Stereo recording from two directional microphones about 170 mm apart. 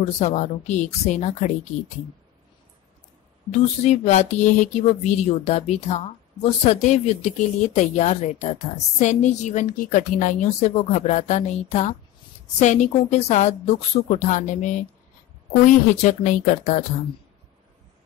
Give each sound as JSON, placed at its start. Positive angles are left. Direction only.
{"t": 0.0, "sound": "speech", "side_deg": 45}
{"t": 3.8, "sound": "speech", "side_deg": 45}